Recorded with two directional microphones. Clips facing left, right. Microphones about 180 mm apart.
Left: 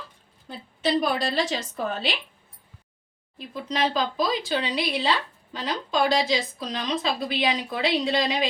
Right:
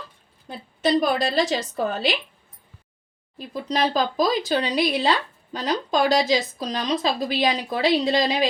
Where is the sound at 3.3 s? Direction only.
40° right (ahead or behind).